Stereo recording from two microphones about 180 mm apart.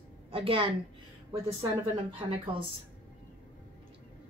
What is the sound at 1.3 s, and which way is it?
Speech, 15° right (ahead or behind).